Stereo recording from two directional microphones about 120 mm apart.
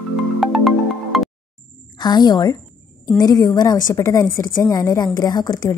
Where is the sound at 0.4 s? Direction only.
Centre (ahead or behind).